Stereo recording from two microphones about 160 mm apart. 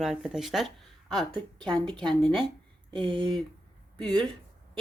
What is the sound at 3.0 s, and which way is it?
Speech, 30° right (ahead or behind).